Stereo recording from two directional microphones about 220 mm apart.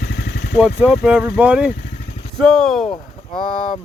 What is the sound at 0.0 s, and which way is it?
Vehicle, 50° left (ahead or behind).